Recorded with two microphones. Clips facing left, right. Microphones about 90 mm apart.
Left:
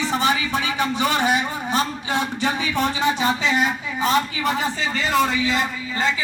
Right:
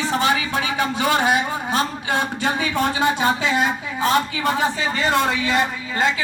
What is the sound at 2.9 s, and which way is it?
A woman's voice, 45° right (ahead or behind).